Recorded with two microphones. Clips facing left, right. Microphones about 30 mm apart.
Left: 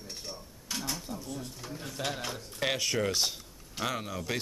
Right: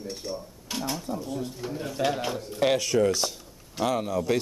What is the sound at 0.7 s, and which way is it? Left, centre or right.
Speech, centre.